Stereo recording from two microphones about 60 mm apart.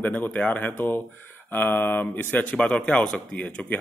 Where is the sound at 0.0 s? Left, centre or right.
Left.